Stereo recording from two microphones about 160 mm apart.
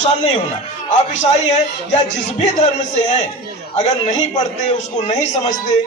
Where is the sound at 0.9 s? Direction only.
45° left (ahead or behind).